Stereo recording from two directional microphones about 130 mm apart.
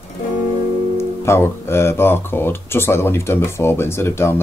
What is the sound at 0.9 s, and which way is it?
Speech, 20° left (ahead or behind).